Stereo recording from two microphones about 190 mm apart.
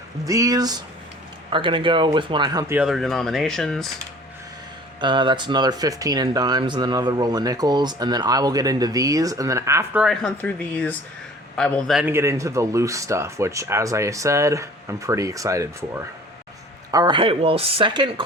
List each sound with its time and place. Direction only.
0.3 s speech: 15° right (ahead or behind)
2.7 s speech: 5° right (ahead or behind)
4.9 s speech: 25° right (ahead or behind)
10.0 s speech: 5° left (ahead or behind)
12.1 s speech: 15° right (ahead or behind)